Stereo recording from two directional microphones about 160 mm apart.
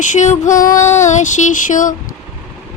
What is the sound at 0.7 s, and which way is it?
Child singing, 15° left (ahead or behind).